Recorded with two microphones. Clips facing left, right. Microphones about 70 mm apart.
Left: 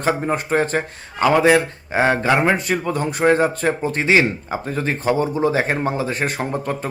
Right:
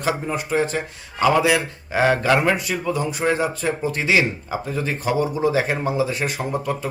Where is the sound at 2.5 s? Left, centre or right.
Left.